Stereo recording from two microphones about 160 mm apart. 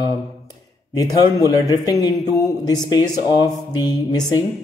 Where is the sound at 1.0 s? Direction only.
20° left (ahead or behind).